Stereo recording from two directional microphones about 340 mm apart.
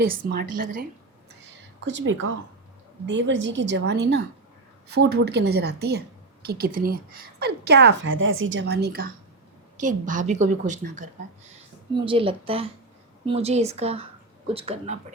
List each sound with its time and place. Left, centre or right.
0.0 s a woman's voice: right
1.5 s a sound: right
3.1 s a woman's voice: right